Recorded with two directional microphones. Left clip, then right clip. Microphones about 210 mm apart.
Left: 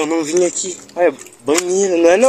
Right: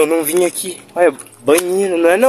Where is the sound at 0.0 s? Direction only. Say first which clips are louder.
Right 2 dB; 20° right (ahead or behind).